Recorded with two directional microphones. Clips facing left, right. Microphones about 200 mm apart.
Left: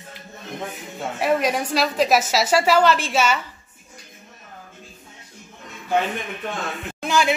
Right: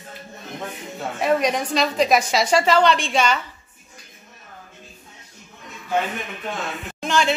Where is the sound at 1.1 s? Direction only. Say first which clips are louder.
Right 1 dB; 5° left (ahead or behind).